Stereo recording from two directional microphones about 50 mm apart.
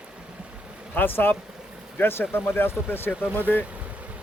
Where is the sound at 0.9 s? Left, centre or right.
Left.